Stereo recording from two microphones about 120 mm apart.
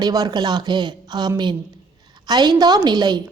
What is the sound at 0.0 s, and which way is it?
A woman's voice, 35° right (ahead or behind).